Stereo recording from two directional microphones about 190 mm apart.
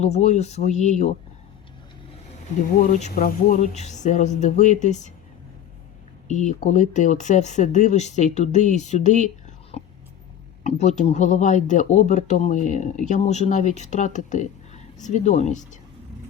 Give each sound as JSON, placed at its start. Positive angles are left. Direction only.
{"t": 0.0, "sound": "speech", "side_deg": 35}
{"t": 2.7, "sound": "speech", "side_deg": 45}
{"t": 6.2, "sound": "speech", "side_deg": 40}
{"t": 10.6, "sound": "speech", "side_deg": 40}